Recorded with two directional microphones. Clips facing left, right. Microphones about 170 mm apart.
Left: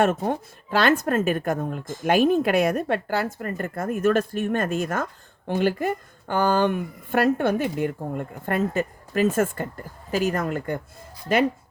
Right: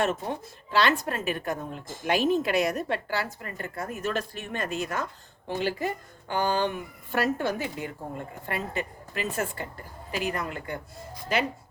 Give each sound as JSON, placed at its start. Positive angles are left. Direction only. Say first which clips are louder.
{"t": 0.0, "sound": "speech", "louder": "left 6 dB", "side_deg": 50}